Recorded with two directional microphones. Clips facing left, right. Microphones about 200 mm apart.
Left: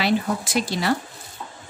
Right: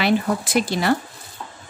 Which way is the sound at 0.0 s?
55° right (ahead or behind).